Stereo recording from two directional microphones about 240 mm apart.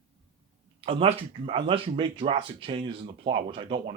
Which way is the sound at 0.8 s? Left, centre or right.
Right.